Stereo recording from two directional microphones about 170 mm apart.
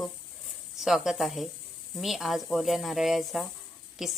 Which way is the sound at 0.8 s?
Centre (ahead or behind).